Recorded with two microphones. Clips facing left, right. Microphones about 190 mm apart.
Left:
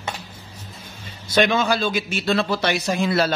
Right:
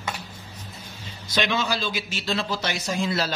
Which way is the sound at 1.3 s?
50° left (ahead or behind).